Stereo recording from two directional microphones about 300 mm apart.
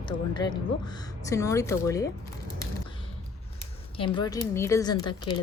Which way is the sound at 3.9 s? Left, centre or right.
Centre.